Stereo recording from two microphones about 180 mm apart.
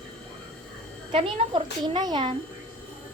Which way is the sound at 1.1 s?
30° right (ahead or behind).